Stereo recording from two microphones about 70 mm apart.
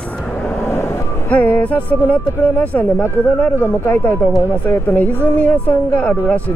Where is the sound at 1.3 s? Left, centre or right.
Left.